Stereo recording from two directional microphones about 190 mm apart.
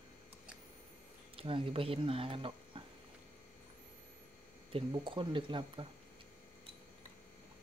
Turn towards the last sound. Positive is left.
turn(degrees=-25)  # may be behind; listen again after turning